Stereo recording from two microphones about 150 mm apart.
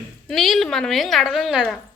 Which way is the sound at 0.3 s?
Centre (ahead or behind).